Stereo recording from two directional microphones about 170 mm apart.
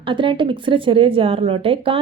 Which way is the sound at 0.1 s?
30° right (ahead or behind).